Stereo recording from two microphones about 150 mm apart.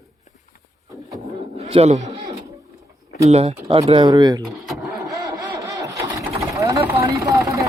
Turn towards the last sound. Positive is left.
turn(degrees=-20)  # may be behind; listen again after turning